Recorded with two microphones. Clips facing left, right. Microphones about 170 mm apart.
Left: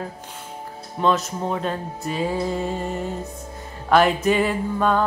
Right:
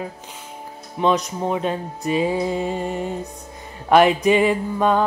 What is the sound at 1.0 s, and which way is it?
Speech, 5° right (ahead or behind).